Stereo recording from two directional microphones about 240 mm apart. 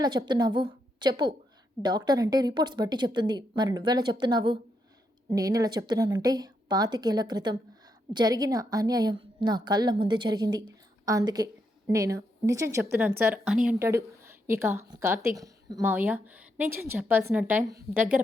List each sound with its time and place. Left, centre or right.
0.0 s speech: centre